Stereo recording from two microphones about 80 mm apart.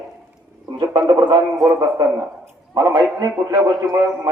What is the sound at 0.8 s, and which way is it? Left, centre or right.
Speech, right.